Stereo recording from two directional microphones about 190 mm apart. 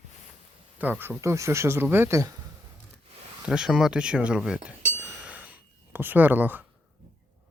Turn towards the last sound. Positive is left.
turn(degrees=-10)  # may be behind; listen again after turning